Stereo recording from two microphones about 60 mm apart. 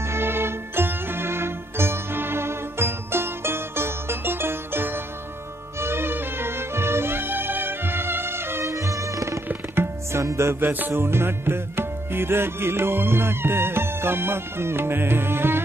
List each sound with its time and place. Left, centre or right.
0.0 s music: right
8.6 s music: right
10.6 s music: right